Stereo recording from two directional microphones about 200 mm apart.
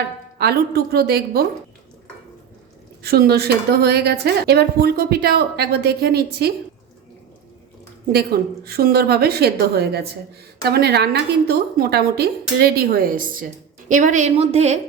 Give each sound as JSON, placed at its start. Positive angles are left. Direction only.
{"t": 0.3, "sound": "a woman's voice", "side_deg": -50}
{"t": 3.0, "sound": "a woman's voice", "side_deg": -50}
{"t": 8.1, "sound": "a woman's voice", "side_deg": -50}